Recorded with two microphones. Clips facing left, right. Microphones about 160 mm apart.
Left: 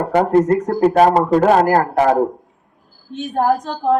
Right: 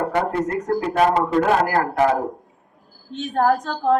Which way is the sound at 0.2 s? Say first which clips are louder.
Left 13 dB; 45° left (ahead or behind).